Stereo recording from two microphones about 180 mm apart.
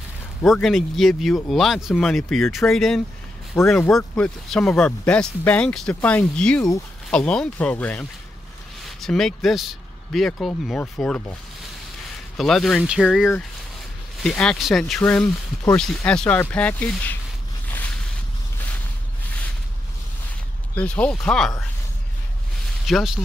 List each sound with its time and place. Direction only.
0.4 s speech: centre (ahead or behind)
3.6 s speech: 20° left (ahead or behind)
3.9 s speech: 5° left (ahead or behind)
12.4 s speech: centre (ahead or behind)
20.7 s speech: 5° left (ahead or behind)
22.8 s speech: centre (ahead or behind)